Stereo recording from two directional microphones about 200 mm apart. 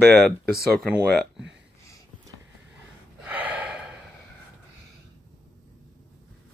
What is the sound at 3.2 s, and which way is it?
Gasp, 10° right (ahead or behind).